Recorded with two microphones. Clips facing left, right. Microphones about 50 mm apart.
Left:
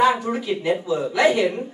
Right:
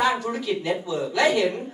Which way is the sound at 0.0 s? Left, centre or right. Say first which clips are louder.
Left 4 dB; left.